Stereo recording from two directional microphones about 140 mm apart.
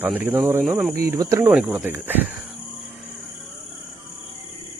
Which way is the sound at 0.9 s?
20° right (ahead or behind).